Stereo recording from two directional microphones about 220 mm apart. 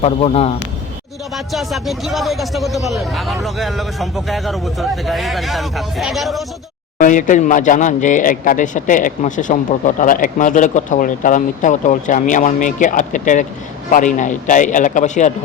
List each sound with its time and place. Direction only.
0.0 s a man's voice: 30° left (ahead or behind)
1.5 s speech: centre (ahead or behind)
7.0 s speech: 35° left (ahead or behind)